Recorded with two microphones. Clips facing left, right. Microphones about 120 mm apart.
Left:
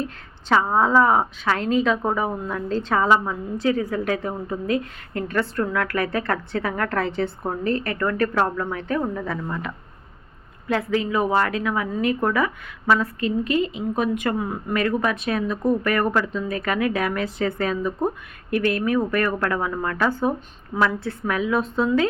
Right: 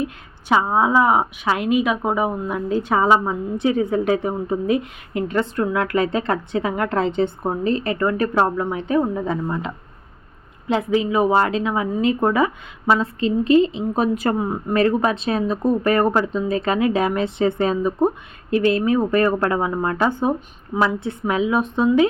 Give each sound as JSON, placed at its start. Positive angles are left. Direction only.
{"t": 0.0, "sound": "speech", "side_deg": -15}